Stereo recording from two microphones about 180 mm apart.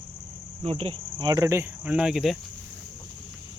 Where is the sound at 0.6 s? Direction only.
35° right (ahead or behind).